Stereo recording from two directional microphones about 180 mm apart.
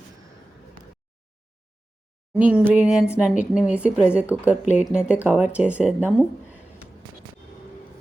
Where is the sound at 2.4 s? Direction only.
5° right (ahead or behind).